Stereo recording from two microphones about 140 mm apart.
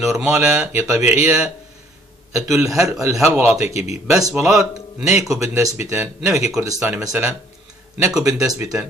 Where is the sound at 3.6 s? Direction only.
50° left (ahead or behind).